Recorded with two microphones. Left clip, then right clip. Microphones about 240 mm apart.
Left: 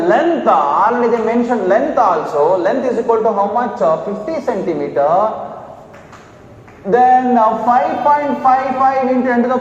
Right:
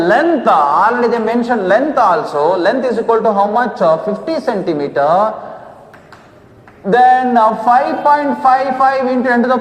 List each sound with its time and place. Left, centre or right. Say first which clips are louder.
0.0 s a man's voice: right 1 dB; right
6.9 s a man's voice: right 1 dB; right